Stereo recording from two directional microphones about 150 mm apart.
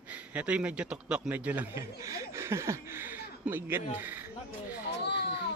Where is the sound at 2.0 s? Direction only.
20° right (ahead or behind).